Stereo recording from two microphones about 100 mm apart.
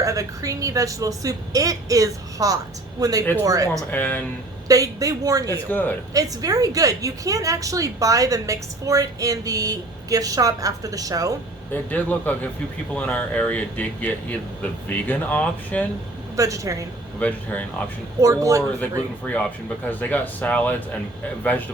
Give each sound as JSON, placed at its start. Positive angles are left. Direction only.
{"t": 0.0, "sound": "a woman's voice", "side_deg": -30}
{"t": 3.9, "sound": "speech", "side_deg": 15}
{"t": 4.7, "sound": "a woman's voice", "side_deg": -35}
{"t": 5.7, "sound": "speech", "side_deg": 20}
{"t": 6.1, "sound": "a woman's voice", "side_deg": -35}
{"t": 11.7, "sound": "speech", "side_deg": 15}
{"t": 16.3, "sound": "speech", "side_deg": -35}
{"t": 17.2, "sound": "speech", "side_deg": 15}
{"t": 18.2, "sound": "a woman's voice", "side_deg": -30}
{"t": 19.2, "sound": "speech", "side_deg": 15}